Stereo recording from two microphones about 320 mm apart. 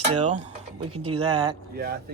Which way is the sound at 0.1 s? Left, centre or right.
Right.